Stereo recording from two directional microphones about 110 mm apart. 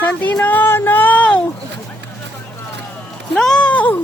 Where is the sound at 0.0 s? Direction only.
15° left (ahead or behind).